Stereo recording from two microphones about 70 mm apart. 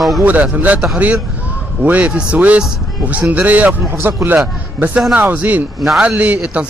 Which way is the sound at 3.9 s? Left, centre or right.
Right.